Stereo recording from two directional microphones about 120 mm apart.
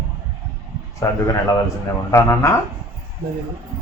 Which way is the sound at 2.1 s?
20° left (ahead or behind).